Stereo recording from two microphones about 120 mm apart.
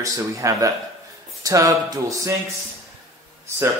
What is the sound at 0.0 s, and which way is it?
Speech, 25° right (ahead or behind).